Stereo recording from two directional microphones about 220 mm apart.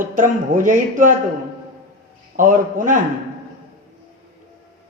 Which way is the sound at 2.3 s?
35° right (ahead or behind).